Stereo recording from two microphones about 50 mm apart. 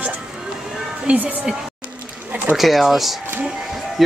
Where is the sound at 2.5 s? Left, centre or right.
Centre.